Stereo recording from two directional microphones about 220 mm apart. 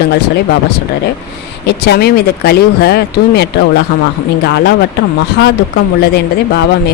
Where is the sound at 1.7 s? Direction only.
50° left (ahead or behind).